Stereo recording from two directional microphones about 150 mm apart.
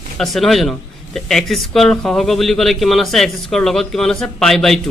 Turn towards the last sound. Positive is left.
turn(degrees=0)  # may be behind; listen again after turning